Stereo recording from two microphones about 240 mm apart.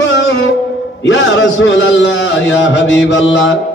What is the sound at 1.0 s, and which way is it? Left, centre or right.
Mantra, left.